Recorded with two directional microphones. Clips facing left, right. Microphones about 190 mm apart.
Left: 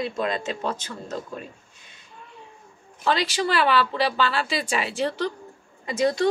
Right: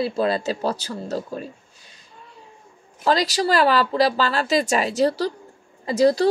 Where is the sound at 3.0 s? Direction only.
40° right (ahead or behind).